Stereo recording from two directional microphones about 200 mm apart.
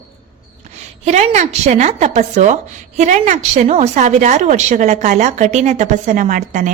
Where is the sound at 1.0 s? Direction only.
35° right (ahead or behind).